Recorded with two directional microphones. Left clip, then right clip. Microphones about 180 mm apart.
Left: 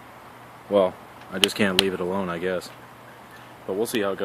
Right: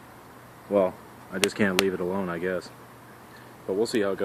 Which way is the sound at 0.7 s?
35° left (ahead or behind).